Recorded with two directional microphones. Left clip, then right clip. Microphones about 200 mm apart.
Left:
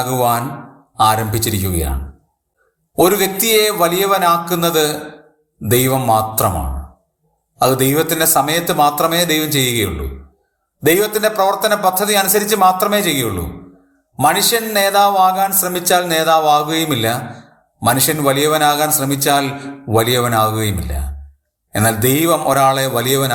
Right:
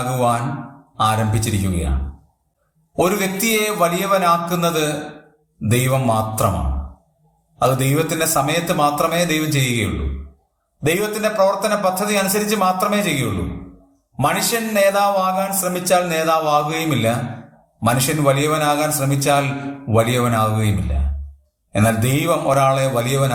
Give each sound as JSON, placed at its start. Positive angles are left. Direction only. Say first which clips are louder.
{"t": 0.1, "sound": "speech", "louder": "left 1 dB", "side_deg": 40}
{"t": 3.0, "sound": "speech", "louder": "left 5 dB", "side_deg": 40}
{"t": 7.6, "sound": "speech", "louder": "left 4 dB", "side_deg": 40}
{"t": 10.8, "sound": "speech", "louder": "left 5 dB", "side_deg": 40}
{"t": 14.2, "sound": "a man's voice", "louder": "left 5 dB", "side_deg": 40}
{"t": 21.8, "sound": "a man's voice", "louder": "left 4 dB", "side_deg": 40}